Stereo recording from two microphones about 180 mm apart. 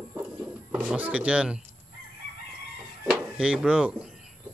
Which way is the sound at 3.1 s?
5° right (ahead or behind).